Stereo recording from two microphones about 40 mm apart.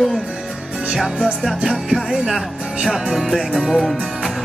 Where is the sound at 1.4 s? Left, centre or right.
Centre.